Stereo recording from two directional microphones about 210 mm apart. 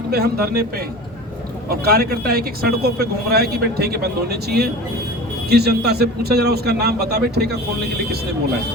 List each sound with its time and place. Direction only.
0.1 s speech: 50° right (ahead or behind)
1.7 s speech: 45° right (ahead or behind)